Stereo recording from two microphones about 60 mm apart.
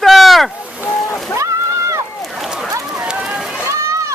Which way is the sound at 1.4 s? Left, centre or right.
Right.